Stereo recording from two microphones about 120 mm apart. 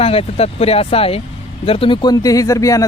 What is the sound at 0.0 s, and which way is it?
Speech, 55° left (ahead or behind).